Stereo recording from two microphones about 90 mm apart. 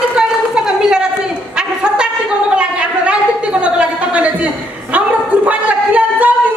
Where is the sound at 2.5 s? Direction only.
15° right (ahead or behind).